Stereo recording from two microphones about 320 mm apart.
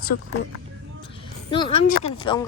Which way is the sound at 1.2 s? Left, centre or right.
Centre.